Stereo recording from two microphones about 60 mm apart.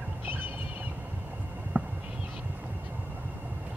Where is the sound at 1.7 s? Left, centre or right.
Right.